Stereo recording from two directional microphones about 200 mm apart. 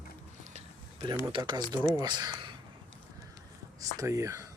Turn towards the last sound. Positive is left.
turn(degrees=-15)  # may be behind; listen again after turning